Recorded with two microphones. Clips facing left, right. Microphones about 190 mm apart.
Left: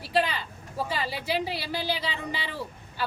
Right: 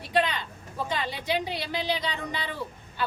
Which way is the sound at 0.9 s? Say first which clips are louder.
Right 2 dB; 5° left (ahead or behind).